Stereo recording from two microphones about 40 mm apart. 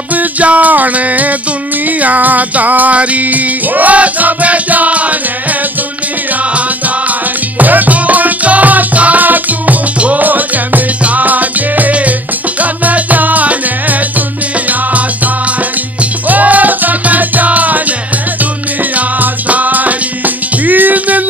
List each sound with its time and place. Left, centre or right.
0.1 s music: right
7.1 s music: right
10.2 s music: right